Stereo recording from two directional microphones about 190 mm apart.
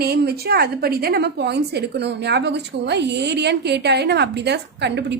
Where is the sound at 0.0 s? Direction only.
55° right (ahead or behind).